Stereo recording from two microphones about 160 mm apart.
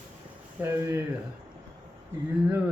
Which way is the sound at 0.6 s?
15° right (ahead or behind).